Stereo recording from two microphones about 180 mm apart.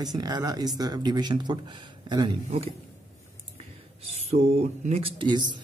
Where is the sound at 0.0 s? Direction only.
20° right (ahead or behind).